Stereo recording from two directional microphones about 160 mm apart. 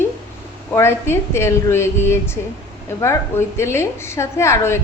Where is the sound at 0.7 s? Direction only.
15° left (ahead or behind).